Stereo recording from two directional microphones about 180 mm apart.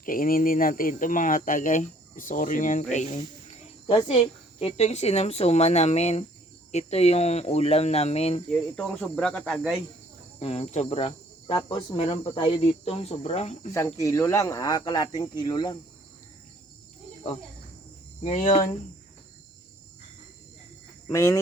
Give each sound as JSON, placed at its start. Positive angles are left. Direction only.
{"t": 0.0, "sound": "speech", "side_deg": 50}
{"t": 3.5, "sound": "speech", "side_deg": 35}
{"t": 8.5, "sound": "speech", "side_deg": 5}
{"t": 10.4, "sound": "speech", "side_deg": 35}
{"t": 14.0, "sound": "speech", "side_deg": 15}
{"t": 18.2, "sound": "speech", "side_deg": 35}
{"t": 21.1, "sound": "speech", "side_deg": 15}